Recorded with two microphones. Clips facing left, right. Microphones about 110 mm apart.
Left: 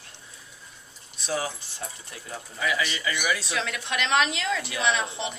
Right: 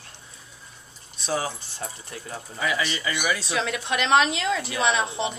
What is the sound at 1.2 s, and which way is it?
A woman's voice, 30° right (ahead or behind).